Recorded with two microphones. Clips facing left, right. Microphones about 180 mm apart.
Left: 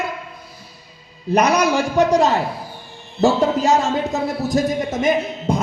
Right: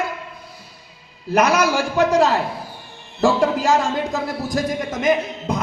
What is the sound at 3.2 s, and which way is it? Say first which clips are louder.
A man's voice: left 1 dB; 25° left (ahead or behind).